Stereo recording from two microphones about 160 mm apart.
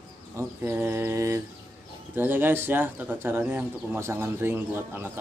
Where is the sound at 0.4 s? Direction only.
15° right (ahead or behind).